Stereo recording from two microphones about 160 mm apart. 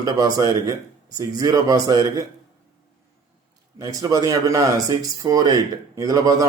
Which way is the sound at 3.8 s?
25° right (ahead or behind).